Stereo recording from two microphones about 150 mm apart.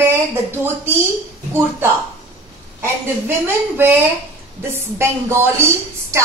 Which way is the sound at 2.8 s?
15° right (ahead or behind).